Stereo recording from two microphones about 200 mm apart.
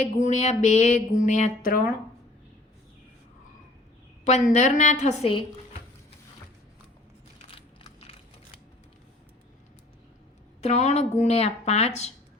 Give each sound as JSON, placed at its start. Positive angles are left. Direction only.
{"t": 0.0, "sound": "speech", "side_deg": 35}
{"t": 4.2, "sound": "speech", "side_deg": 35}
{"t": 10.6, "sound": "speech", "side_deg": 35}